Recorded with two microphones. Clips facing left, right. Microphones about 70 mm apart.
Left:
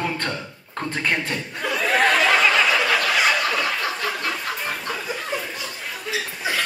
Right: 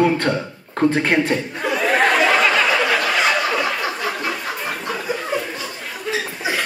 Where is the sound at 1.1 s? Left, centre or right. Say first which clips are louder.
Right 8 dB; centre.